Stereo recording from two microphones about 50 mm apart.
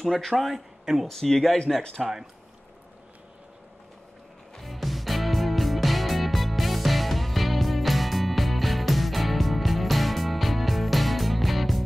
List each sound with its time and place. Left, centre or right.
0.0 s speech: centre
1.0 s speech: centre
2.0 s speech: centre
4.6 s music: centre